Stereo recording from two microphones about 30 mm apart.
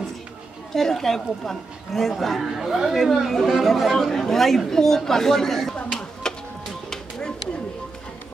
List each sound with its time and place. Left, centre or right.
0.7 s speech: centre
2.4 s speech: centre
2.9 s speech: centre
4.1 s speech: centre
5.9 s tick-tock: centre
6.9 s a sound: left